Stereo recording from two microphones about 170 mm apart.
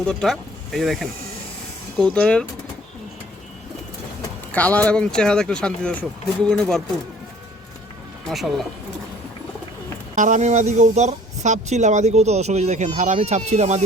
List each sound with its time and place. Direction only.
0.0 s speech: 5° left (ahead or behind)
4.5 s speech: 10° left (ahead or behind)
8.3 s speech: centre (ahead or behind)
10.2 s speech: 45° right (ahead or behind)